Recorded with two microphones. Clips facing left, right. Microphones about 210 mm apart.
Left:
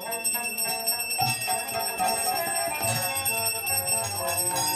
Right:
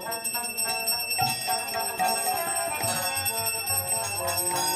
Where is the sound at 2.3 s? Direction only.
10° left (ahead or behind).